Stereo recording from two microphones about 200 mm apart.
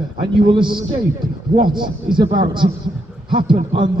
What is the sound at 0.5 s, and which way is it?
A man's voice, 25° right (ahead or behind).